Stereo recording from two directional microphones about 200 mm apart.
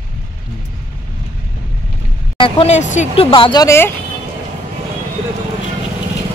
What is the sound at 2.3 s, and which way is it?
Speech, 25° left (ahead or behind).